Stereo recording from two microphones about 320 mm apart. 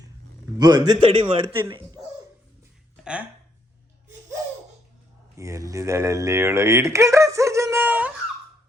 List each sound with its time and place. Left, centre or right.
0.6 s a man's voice: centre
3.0 s speech: centre
5.4 s speech: centre